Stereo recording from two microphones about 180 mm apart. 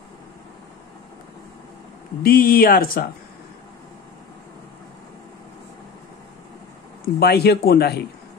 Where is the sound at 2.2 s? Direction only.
55° left (ahead or behind).